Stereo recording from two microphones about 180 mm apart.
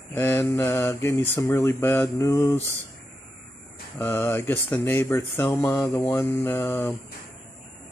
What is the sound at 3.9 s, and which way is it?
Speech, 15° left (ahead or behind).